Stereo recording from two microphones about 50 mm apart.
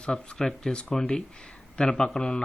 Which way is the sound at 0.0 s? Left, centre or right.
Centre.